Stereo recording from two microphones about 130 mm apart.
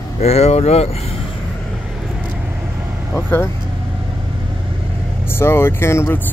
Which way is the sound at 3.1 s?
20° left (ahead or behind).